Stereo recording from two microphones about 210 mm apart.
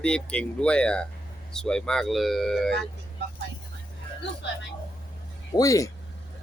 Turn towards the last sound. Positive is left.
turn(degrees=15)  # may be behind; listen again after turning